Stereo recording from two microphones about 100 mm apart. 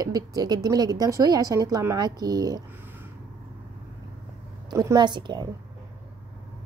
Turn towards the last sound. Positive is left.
turn(degrees=-50)  # may be behind; listen again after turning